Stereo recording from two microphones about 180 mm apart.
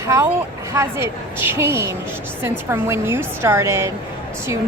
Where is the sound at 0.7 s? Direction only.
15° right (ahead or behind).